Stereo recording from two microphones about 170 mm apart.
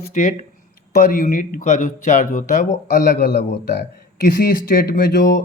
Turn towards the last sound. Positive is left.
turn(degrees=65)  # may be behind; listen again after turning